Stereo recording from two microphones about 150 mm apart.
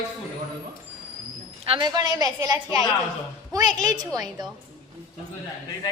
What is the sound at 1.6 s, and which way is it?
A woman's voice, 35° right (ahead or behind).